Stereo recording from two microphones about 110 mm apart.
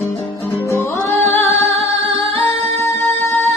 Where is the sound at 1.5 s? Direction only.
60° right (ahead or behind).